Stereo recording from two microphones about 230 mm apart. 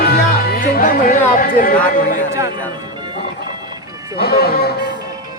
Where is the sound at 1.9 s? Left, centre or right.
Left.